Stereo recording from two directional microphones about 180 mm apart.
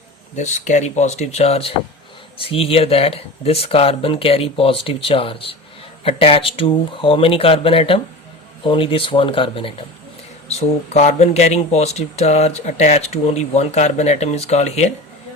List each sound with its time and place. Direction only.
0.3 s speech: 40° left (ahead or behind)